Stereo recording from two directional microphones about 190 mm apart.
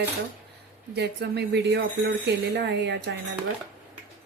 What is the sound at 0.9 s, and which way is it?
Speech, 60° right (ahead or behind).